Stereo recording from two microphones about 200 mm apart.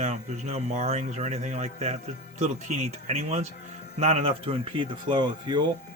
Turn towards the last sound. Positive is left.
turn(degrees=-20)  # may be behind; listen again after turning